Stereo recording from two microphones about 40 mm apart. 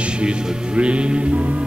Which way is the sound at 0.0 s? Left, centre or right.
Right.